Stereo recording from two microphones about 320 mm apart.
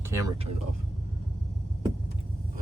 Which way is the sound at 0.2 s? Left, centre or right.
Centre.